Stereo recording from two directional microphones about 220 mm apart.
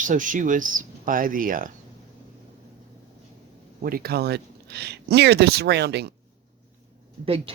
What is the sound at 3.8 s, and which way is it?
Speech, 45° right (ahead or behind).